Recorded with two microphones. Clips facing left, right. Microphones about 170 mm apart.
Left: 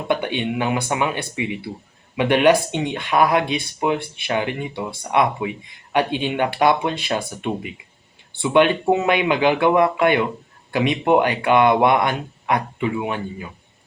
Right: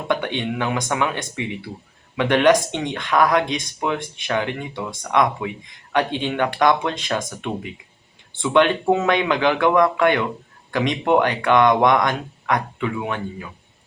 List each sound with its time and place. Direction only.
0.1 s speech: 15° left (ahead or behind)
8.4 s speech: 15° left (ahead or behind)